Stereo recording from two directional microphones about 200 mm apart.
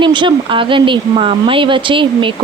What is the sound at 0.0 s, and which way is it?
A woman's voice, 25° right (ahead or behind).